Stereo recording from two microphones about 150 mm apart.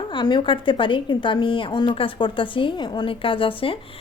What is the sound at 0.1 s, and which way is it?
A woman's voice, 30° left (ahead or behind).